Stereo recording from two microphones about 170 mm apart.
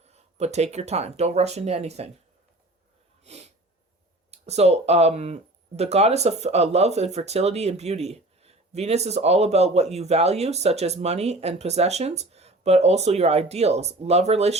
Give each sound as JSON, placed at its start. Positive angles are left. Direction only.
{"t": 0.1, "sound": "speech", "side_deg": -40}
{"t": 4.3, "sound": "speech", "side_deg": -40}